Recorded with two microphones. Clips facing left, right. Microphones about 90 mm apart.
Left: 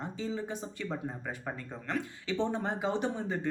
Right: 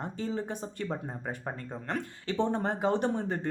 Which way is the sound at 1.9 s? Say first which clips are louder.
Even; 50° right (ahead or behind).